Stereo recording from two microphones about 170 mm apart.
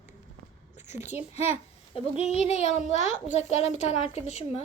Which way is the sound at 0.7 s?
40° left (ahead or behind).